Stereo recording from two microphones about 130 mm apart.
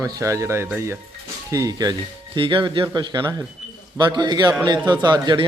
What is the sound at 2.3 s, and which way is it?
Speech, 40° right (ahead or behind).